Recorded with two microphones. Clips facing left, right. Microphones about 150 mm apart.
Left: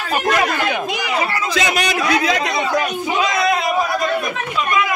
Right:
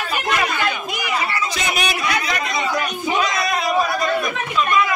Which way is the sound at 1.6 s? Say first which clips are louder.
Left 6 dB; 90° left.